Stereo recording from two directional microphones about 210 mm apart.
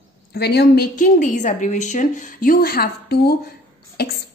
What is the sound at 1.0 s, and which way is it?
A woman's voice, 35° left (ahead or behind).